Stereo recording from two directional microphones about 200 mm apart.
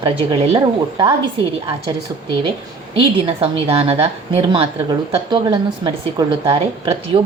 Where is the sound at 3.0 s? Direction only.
25° right (ahead or behind).